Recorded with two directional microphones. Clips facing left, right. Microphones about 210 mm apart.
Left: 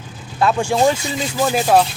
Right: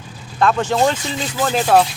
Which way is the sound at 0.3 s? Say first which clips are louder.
Even; 10° left (ahead or behind).